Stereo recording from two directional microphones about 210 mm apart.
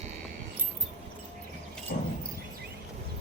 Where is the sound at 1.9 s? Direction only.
40° left (ahead or behind).